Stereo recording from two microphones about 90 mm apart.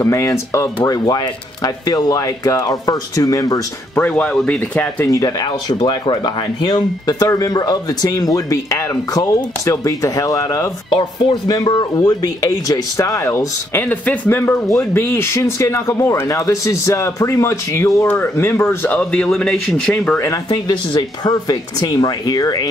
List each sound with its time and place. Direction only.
0.0 s speech: 35° left (ahead or behind)
0.8 s speech: 45° left (ahead or behind)
4.1 s speech: 10° left (ahead or behind)
5.0 s speech: 40° left (ahead or behind)
10.9 s speech: 75° left (ahead or behind)
11.4 s speech: 50° left (ahead or behind)
13.7 s speech: 20° left (ahead or behind)
18.9 s speech: 15° left (ahead or behind)
20.4 s speech: 55° left (ahead or behind)